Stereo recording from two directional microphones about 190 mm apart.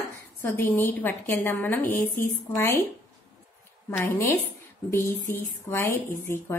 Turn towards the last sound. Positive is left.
turn(degrees=15)  # may be behind; listen again after turning